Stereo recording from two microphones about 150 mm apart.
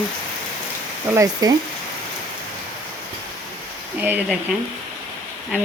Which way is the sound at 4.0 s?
10° right (ahead or behind).